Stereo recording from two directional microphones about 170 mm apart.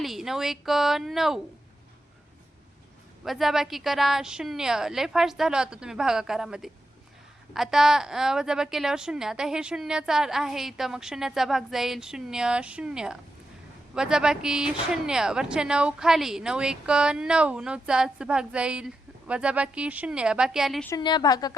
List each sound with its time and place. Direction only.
0.0 s a woman's voice: centre (ahead or behind)
3.2 s a woman's voice: centre (ahead or behind)
20.9 s a woman's voice: 25° left (ahead or behind)